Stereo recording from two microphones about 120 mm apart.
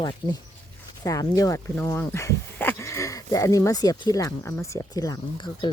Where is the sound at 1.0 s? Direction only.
30° left (ahead or behind).